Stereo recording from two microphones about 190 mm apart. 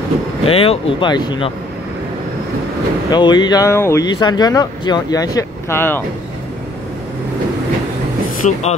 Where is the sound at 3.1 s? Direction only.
25° left (ahead or behind).